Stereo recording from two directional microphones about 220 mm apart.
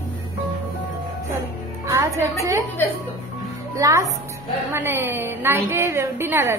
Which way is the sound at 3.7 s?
15° right (ahead or behind).